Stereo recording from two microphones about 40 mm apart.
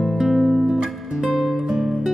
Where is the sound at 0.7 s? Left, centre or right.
Centre.